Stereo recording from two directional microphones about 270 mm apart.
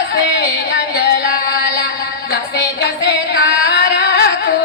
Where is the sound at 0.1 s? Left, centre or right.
Left.